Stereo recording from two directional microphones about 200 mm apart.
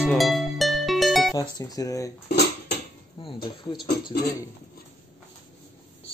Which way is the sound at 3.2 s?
25° left (ahead or behind).